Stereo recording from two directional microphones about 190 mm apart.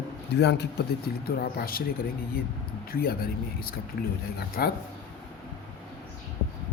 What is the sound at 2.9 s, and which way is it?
Speech, 55° left (ahead or behind).